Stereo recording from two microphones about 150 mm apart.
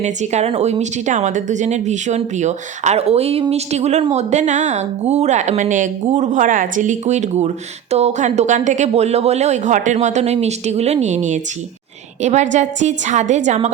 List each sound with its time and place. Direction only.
0.0 s speech: 50° right (ahead or behind)